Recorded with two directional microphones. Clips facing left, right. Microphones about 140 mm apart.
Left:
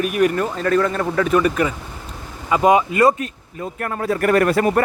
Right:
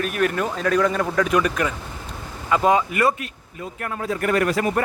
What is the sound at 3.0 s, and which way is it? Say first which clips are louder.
Speech: left 5 dB; 40° left (ahead or behind).